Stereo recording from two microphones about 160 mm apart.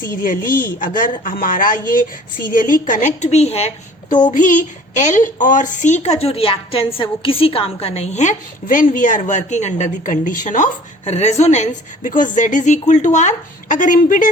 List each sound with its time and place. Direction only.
0.2 s a woman's voice: 60° left (ahead or behind)
2.8 s speech: 50° left (ahead or behind)